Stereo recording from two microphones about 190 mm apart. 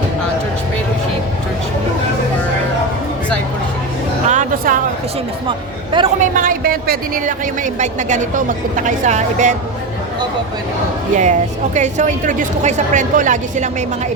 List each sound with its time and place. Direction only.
4.3 s music: 40° right (ahead or behind)
5.5 s speech: 25° right (ahead or behind)
6.1 s speech: 45° right (ahead or behind)
11.2 s a woman's voice: 40° right (ahead or behind)